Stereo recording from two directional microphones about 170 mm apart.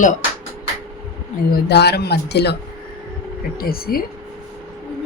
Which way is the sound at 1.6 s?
75° left (ahead or behind).